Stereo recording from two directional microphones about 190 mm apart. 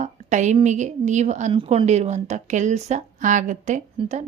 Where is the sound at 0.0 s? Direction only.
40° right (ahead or behind).